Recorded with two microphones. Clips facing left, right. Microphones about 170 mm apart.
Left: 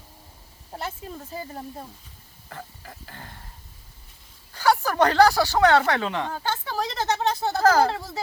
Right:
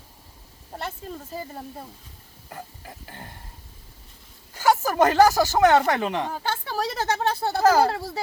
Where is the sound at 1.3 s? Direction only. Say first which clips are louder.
Left 2 dB; centre (ahead or behind).